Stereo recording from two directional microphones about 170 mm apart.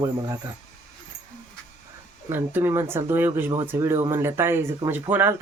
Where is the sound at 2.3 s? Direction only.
15° right (ahead or behind).